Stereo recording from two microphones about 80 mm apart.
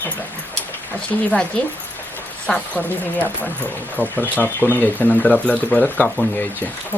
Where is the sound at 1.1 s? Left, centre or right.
Centre.